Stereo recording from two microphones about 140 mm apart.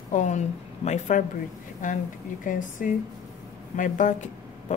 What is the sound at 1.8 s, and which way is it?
A woman's voice, 65° left (ahead or behind).